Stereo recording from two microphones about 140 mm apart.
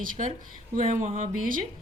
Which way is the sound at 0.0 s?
80° right.